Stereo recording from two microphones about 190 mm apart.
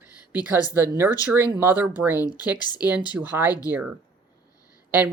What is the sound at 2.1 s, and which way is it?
Speech, 20° left (ahead or behind).